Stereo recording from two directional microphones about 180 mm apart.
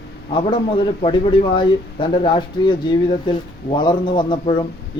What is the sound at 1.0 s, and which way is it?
Speech, 25° left (ahead or behind).